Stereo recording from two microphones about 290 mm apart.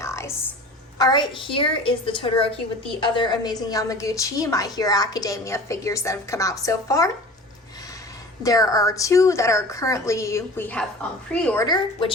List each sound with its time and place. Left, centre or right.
0.0 s a sound: centre
0.9 s a woman's voice: centre
8.4 s a woman's voice: centre